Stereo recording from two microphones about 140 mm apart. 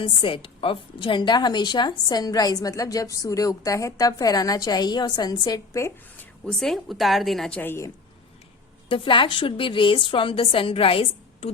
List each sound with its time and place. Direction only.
0.0 s a woman's voice: 35° left (ahead or behind)
6.4 s a woman's voice: 5° left (ahead or behind)
7.6 s a woman's voice: 15° left (ahead or behind)
8.9 s a woman's voice: 35° left (ahead or behind)